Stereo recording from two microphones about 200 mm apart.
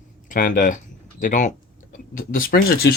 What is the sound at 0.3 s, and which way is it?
Speech, 45° left (ahead or behind).